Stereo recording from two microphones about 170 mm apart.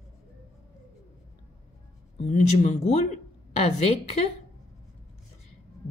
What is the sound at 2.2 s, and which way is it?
Speech, 40° left (ahead or behind).